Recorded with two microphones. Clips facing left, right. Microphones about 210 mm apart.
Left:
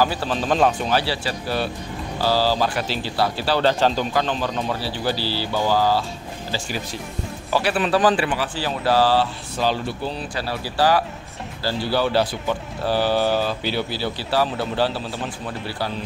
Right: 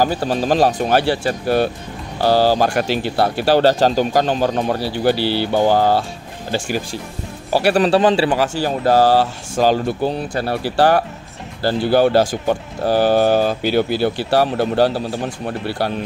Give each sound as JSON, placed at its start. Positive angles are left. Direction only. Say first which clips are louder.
{"t": 0.0, "sound": "speech", "louder": "right 4 dB", "side_deg": -45}
{"t": 0.8, "sound": "speech", "louder": "right 6 dB", "side_deg": -50}
{"t": 7.7, "sound": "speech", "louder": "right 7 dB", "side_deg": -40}
{"t": 8.0, "sound": "a man's voice", "louder": "right 4 dB", "side_deg": -25}
{"t": 8.3, "sound": "speech", "louder": "right 7 dB", "side_deg": -45}
{"t": 14.6, "sound": "speech", "louder": "right 7 dB", "side_deg": -45}